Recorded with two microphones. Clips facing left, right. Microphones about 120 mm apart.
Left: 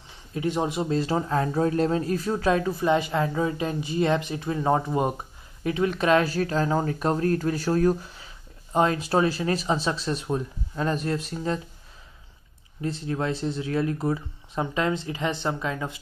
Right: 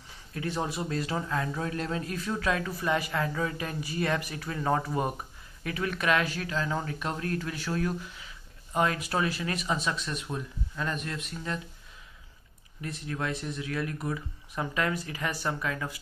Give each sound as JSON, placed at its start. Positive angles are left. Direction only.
{"t": 0.3, "sound": "speech", "side_deg": 20}
{"t": 12.8, "sound": "speech", "side_deg": 30}